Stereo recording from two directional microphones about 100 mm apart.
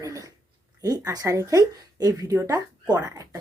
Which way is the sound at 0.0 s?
35° right (ahead or behind).